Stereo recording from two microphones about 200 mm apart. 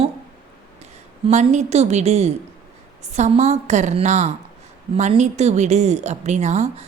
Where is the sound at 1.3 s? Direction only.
35° right (ahead or behind).